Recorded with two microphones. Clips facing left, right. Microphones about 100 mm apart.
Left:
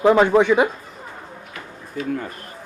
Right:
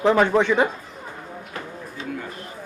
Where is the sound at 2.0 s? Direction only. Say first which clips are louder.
Left 8 dB; 25° right (ahead or behind).